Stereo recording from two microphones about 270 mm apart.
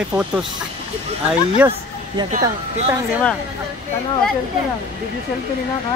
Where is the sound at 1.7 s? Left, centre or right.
Centre.